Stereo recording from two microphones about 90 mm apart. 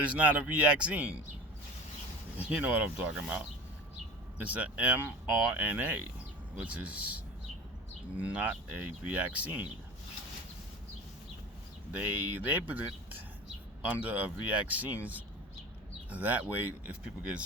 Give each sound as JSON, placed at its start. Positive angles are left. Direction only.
{"t": 0.1, "sound": "speech", "side_deg": -15}
{"t": 2.4, "sound": "speech", "side_deg": -15}
{"t": 8.2, "sound": "speech", "side_deg": -15}
{"t": 11.9, "sound": "speech", "side_deg": -20}